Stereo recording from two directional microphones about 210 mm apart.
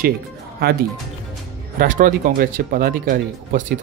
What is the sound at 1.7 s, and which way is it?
Speech, 40° right (ahead or behind).